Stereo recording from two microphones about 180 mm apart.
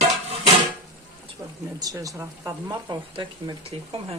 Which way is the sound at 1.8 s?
20° right (ahead or behind).